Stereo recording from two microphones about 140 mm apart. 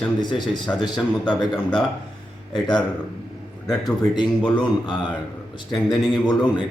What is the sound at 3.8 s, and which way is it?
A man's voice, 30° left (ahead or behind).